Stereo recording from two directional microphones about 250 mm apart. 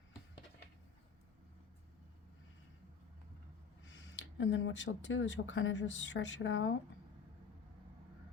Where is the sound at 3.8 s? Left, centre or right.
Left.